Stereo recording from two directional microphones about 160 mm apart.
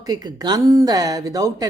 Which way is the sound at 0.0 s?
25° right (ahead or behind).